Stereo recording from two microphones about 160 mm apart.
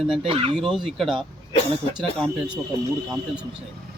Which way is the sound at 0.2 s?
35° right (ahead or behind).